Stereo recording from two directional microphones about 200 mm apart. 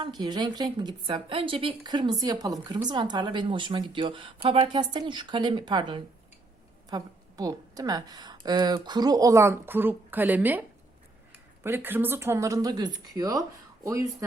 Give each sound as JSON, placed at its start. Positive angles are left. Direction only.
{"t": 0.2, "sound": "a woman's voice", "side_deg": -20}